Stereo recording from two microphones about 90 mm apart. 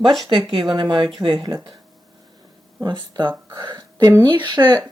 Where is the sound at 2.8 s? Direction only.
60° right (ahead or behind).